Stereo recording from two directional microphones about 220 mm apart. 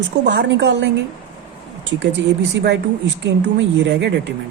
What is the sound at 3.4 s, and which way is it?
Speech, 50° right (ahead or behind).